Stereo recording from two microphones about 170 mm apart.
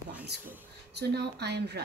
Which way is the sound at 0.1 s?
10° right (ahead or behind).